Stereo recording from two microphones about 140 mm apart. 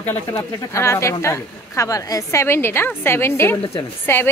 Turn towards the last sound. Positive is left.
turn(degrees=15)  # may be behind; listen again after turning